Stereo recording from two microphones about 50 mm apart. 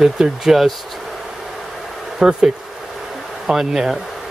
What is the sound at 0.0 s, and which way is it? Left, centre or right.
Speech, centre.